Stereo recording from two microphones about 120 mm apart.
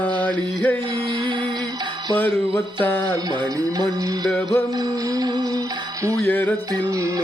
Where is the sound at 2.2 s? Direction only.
15° left (ahead or behind).